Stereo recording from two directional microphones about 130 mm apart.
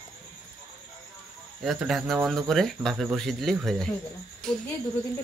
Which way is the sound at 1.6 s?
Centre (ahead or behind).